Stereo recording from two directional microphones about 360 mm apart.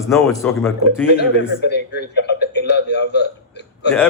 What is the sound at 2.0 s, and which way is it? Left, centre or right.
A man's voice, left.